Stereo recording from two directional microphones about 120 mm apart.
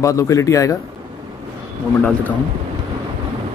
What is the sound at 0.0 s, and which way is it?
Speech, 25° left (ahead or behind).